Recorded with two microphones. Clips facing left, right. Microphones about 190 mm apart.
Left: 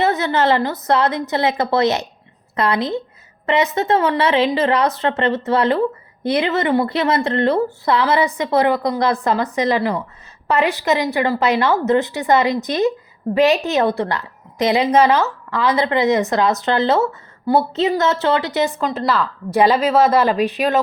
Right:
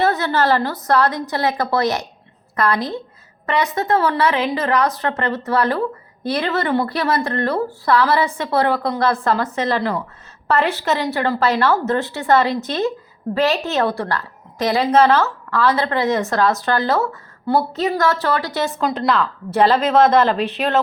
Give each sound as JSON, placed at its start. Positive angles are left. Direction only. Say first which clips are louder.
{"t": 0.0, "sound": "a woman's voice", "louder": "left 1 dB", "side_deg": 20}
{"t": 18.8, "sound": "a woman's voice", "louder": "right 1 dB", "side_deg": 5}